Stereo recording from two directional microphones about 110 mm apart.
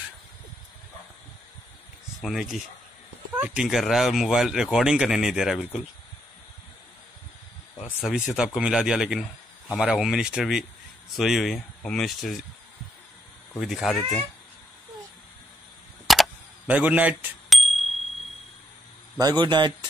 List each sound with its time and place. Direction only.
2.2 s speech: centre (ahead or behind)
3.3 s speech: 15° right (ahead or behind)
3.6 s speech: centre (ahead or behind)
7.8 s speech: centre (ahead or behind)
13.6 s speech: centre (ahead or behind)
16.1 s a sound: centre (ahead or behind)
16.6 s speech: 15° right (ahead or behind)
17.5 s bicycle bell: centre (ahead or behind)
19.4 s speech: 45° right (ahead or behind)